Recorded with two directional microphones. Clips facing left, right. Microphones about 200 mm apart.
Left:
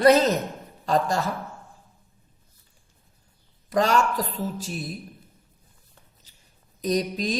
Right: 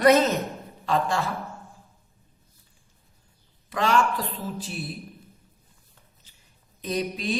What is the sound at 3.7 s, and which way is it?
Speech, 40° left (ahead or behind).